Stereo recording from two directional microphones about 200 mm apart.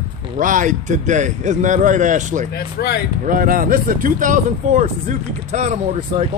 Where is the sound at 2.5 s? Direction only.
55° left (ahead or behind).